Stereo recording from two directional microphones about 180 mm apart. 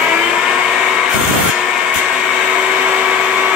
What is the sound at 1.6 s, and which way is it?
Vacuum cleaner, 5° right (ahead or behind).